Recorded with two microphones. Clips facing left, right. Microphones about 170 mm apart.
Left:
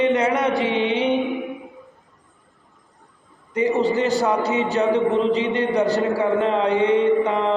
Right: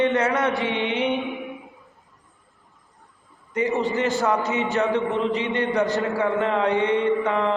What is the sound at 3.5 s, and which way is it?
A man's voice, 35° left (ahead or behind).